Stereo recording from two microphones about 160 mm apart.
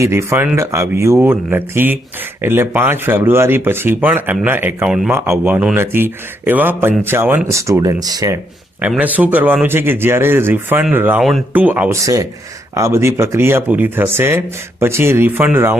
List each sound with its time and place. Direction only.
0.0 s speech: 15° right (ahead or behind)
9.0 s speech: 10° right (ahead or behind)
11.2 s speech: centre (ahead or behind)
11.5 s speech: 10° right (ahead or behind)